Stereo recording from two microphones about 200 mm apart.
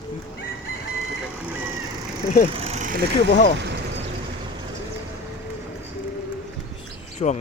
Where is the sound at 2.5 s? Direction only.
30° right (ahead or behind).